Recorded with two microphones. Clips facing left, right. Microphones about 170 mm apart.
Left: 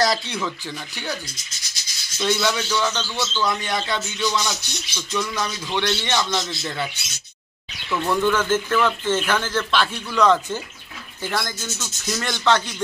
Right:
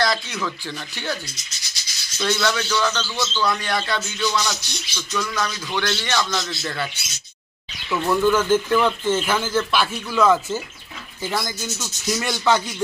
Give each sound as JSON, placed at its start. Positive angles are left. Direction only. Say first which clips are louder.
{"t": 0.0, "sound": "speech", "louder": "left 1 dB", "side_deg": 35}
{"t": 0.4, "sound": "a sound", "louder": "even", "side_deg": 10}
{"t": 5.7, "sound": "a man's voice", "louder": "left 4 dB", "side_deg": 20}
{"t": 7.9, "sound": "speech", "louder": "right 2 dB", "side_deg": -5}